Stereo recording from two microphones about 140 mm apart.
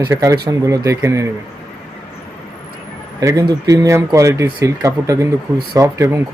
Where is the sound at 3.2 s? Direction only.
25° right (ahead or behind).